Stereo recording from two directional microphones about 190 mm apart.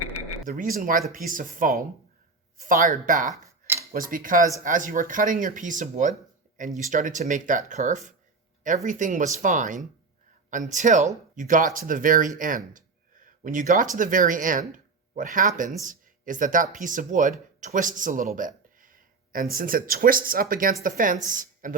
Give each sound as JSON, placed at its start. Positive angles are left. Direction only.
{"t": 0.4, "sound": "speech", "side_deg": -45}